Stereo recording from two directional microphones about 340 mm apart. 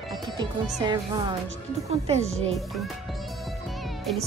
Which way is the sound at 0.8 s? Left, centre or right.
Centre.